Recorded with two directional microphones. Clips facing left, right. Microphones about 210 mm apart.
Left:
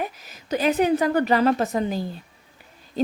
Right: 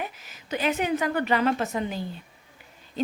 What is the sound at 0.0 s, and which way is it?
A woman's voice, 40° left (ahead or behind).